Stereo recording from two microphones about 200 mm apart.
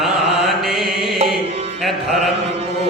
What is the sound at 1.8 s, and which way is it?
Mantra, centre (ahead or behind).